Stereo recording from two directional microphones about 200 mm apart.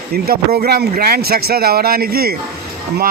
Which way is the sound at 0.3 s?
50° right (ahead or behind).